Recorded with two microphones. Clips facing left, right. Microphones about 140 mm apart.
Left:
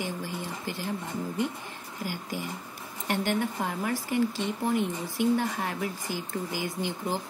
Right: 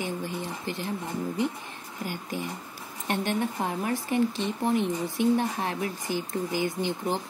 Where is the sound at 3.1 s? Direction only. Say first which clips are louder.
Even; 25° right (ahead or behind).